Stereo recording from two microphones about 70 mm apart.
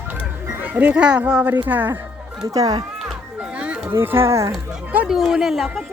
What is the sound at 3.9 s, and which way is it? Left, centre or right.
Speech, right.